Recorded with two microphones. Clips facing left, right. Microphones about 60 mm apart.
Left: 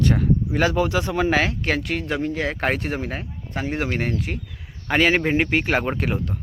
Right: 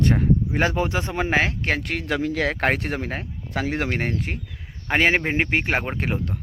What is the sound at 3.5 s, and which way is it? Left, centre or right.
Speech, right.